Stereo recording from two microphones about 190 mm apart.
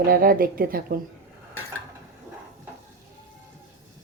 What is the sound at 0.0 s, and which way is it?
A woman's voice, 50° right (ahead or behind).